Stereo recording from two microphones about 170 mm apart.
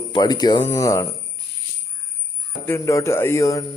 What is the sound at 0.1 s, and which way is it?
Speech, 25° left (ahead or behind).